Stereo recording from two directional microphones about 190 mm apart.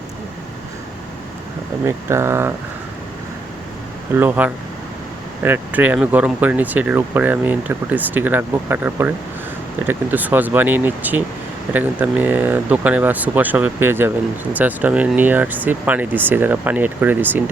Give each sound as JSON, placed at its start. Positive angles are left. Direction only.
{"t": 1.8, "sound": "speech", "side_deg": -15}
{"t": 4.1, "sound": "speech", "side_deg": -10}